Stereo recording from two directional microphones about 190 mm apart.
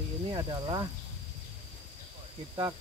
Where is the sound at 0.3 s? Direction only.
20° right (ahead or behind).